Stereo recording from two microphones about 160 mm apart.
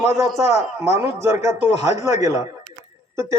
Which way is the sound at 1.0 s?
15° right (ahead or behind).